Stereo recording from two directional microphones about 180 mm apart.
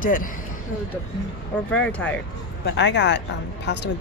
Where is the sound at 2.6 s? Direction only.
75° left (ahead or behind).